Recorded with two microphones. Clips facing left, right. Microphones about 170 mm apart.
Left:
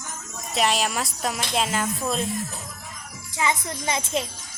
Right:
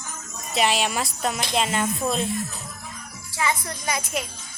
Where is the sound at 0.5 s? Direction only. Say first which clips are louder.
Right 1 dB; centre (ahead or behind).